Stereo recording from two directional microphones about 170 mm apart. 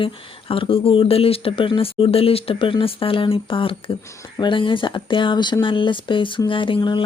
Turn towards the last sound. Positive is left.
turn(degrees=30)  # may be behind; listen again after turning